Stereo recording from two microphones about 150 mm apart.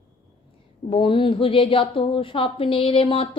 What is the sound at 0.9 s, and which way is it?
A woman's voice, 35° left (ahead or behind).